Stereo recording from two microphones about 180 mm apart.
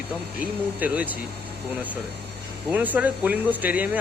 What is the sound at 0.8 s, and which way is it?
Speech, 10° right (ahead or behind).